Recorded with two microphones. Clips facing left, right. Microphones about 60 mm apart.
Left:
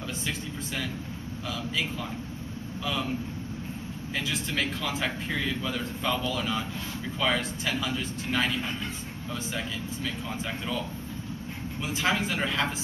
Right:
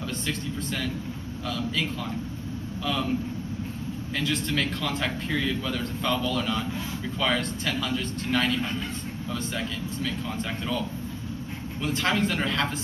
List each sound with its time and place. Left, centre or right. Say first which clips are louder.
0.3 s a man's voice: right 4 dB; centre
4.2 s a man's voice: right 3 dB; centre
11.8 s a man's voice: right 2 dB; centre